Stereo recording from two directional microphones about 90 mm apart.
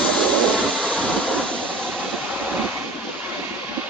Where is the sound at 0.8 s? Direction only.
10° left (ahead or behind).